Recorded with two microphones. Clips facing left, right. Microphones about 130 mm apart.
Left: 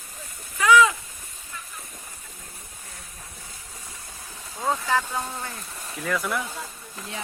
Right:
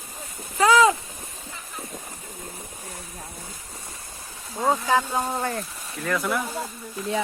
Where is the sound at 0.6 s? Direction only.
35° right (ahead or behind).